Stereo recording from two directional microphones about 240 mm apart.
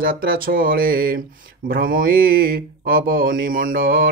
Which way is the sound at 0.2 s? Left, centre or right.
Right.